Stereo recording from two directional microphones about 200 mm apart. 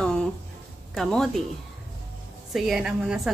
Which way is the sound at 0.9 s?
Centre (ahead or behind).